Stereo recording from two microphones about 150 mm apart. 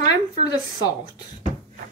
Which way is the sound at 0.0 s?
25° left (ahead or behind).